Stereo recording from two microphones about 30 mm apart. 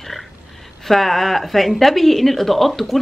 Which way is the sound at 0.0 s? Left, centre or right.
Centre.